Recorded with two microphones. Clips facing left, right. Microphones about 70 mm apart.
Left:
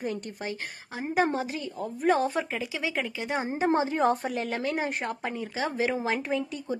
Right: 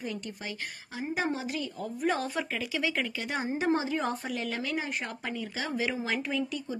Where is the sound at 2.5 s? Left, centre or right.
Centre; by 5.1 s left.